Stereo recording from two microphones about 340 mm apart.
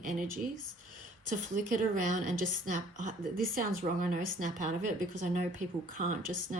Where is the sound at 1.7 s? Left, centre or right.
Right.